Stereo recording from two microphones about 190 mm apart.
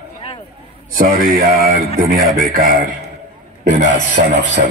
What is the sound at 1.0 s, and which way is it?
Speech, 50° right (ahead or behind).